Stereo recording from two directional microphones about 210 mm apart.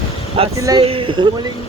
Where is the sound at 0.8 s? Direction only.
25° right (ahead or behind).